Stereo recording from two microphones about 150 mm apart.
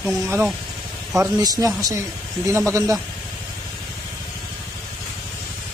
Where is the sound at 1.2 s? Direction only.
25° right (ahead or behind).